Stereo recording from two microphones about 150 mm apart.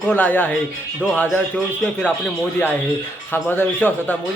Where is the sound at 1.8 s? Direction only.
10° left (ahead or behind).